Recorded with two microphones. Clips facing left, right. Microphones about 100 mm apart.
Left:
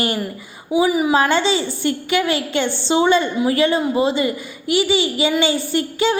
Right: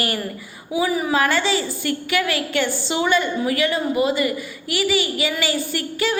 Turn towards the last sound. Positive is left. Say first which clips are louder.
# left 5 dB
turn(degrees=25)  # may be behind; listen again after turning